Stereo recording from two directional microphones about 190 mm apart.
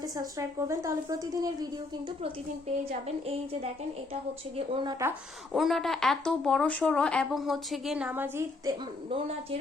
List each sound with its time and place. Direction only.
0.0 s a woman's voice: 20° right (ahead or behind)
4.1 s a woman's voice: 30° right (ahead or behind)
5.5 s speech: centre (ahead or behind)
9.0 s speech: 30° right (ahead or behind)